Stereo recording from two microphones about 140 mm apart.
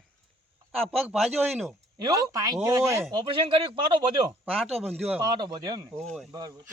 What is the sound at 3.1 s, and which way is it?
Speech, 35° right (ahead or behind).